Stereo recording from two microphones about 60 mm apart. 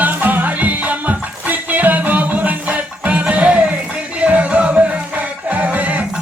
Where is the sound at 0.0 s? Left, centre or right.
Right.